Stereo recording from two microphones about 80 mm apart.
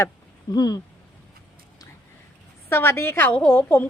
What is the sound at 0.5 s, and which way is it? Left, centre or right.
Speech, left.